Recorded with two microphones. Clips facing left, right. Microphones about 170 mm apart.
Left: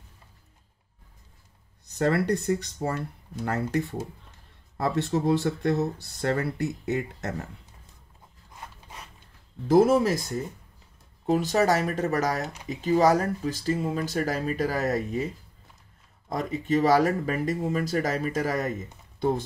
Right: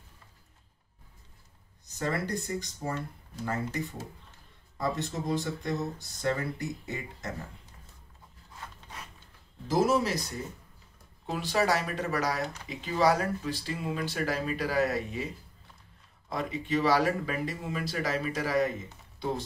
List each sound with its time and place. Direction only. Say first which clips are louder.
2.0 s speech: left 8 dB; 70° left (ahead or behind)
9.7 s speech: left 7 dB; 55° left (ahead or behind)
16.3 s speech: left 5 dB; 45° left (ahead or behind)